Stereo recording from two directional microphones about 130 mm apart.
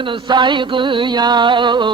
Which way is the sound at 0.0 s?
40° right (ahead or behind).